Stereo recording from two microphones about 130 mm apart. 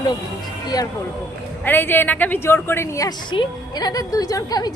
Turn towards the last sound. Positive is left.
turn(degrees=30)  # may be behind; listen again after turning